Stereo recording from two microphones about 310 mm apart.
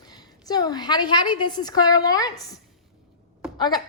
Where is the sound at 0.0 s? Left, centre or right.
Centre.